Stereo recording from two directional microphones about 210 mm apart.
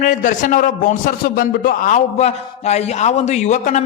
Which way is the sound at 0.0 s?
40° left (ahead or behind).